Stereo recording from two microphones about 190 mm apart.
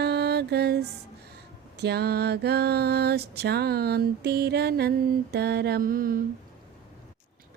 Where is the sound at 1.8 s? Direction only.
60° right (ahead or behind).